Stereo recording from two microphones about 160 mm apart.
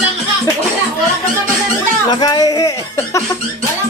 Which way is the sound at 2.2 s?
25° left (ahead or behind).